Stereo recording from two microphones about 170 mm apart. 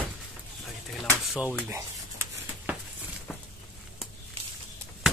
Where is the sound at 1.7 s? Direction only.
15° right (ahead or behind).